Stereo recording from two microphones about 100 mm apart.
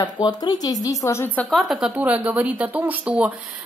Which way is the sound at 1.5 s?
Centre (ahead or behind).